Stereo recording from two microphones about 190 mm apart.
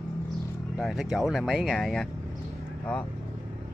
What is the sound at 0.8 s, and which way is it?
Speech, centre (ahead or behind).